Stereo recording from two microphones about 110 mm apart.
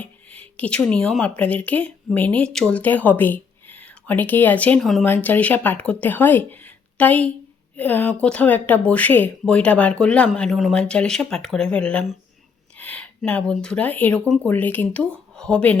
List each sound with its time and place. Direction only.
0.0 s a sound: 10° left (ahead or behind)
1.4 s speech: 15° left (ahead or behind)
4.8 s speech: centre (ahead or behind)
5.0 s speech: 20° left (ahead or behind)